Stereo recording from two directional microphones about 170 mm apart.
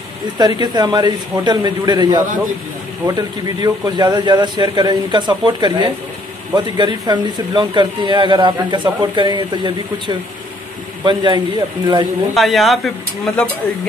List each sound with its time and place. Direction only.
0.4 s a man's voice: 25° right (ahead or behind)
12.4 s speech: centre (ahead or behind)